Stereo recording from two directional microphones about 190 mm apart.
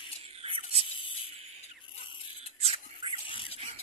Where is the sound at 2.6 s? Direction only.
30° right (ahead or behind).